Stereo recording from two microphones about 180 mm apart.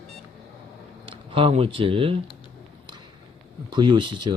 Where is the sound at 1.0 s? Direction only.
30° right (ahead or behind).